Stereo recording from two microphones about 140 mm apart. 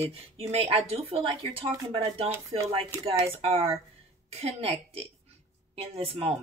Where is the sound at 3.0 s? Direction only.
45° right (ahead or behind).